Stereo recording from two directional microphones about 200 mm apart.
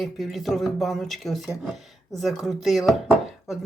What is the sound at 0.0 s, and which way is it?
Speech, centre (ahead or behind).